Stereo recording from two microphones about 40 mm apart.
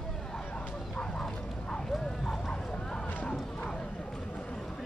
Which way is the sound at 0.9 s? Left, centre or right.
Centre.